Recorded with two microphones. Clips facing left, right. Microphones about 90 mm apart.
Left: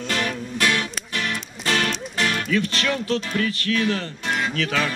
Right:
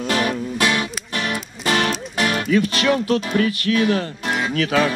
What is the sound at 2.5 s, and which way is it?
Speech, 15° right (ahead or behind).